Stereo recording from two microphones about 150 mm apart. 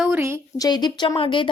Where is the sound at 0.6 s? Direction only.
30° left (ahead or behind).